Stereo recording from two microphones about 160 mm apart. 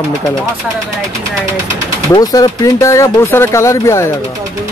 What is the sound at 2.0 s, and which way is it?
Speech, 25° left (ahead or behind).